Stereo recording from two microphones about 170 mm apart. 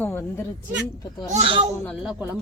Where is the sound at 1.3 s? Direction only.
35° right (ahead or behind).